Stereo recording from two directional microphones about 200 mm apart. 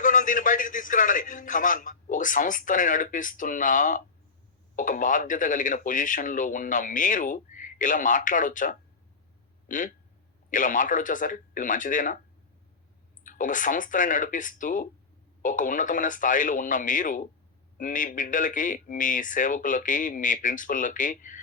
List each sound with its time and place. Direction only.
0.0 s speech: 40° left (ahead or behind)
13.2 s speech: 40° left (ahead or behind)